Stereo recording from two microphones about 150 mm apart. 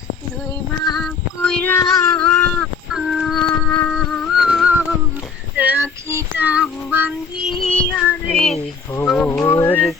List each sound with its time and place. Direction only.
0.9 s child singing: 5° left (ahead or behind)
2.9 s music: 5° right (ahead or behind)
5.5 s child singing: 10° right (ahead or behind)
7.9 s child singing: 15° left (ahead or behind)
9.0 s music: 5° left (ahead or behind)
9.4 s music: 20° left (ahead or behind)